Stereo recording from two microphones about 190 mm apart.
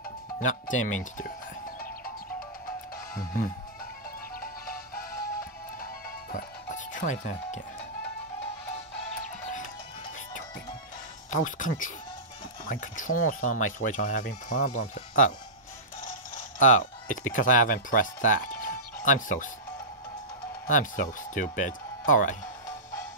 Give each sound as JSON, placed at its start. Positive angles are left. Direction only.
{"t": 0.4, "sound": "speech", "side_deg": 40}
{"t": 3.2, "sound": "speech", "side_deg": 50}
{"t": 4.4, "sound": "music", "side_deg": 50}
{"t": 11.2, "sound": "speech", "side_deg": 45}
{"t": 16.5, "sound": "speech", "side_deg": 40}
{"t": 20.6, "sound": "speech", "side_deg": 40}